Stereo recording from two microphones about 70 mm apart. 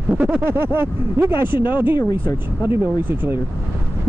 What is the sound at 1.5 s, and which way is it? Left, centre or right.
Speech, right.